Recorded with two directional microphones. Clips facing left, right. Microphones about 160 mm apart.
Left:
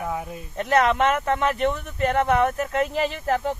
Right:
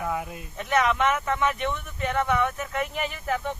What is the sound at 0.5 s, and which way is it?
Speech, 40° left (ahead or behind).